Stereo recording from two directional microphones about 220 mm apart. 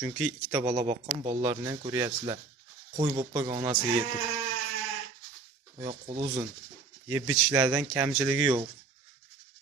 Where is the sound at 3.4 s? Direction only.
15° right (ahead or behind).